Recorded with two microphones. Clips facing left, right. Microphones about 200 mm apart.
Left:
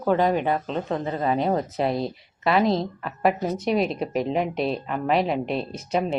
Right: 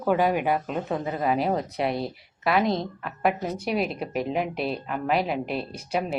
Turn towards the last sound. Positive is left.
turn(degrees=-5)  # may be behind; listen again after turning